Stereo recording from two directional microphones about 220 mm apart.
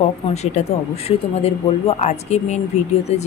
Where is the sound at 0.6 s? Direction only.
35° left (ahead or behind).